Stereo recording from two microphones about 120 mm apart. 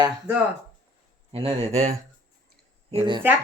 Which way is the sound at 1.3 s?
55° right (ahead or behind).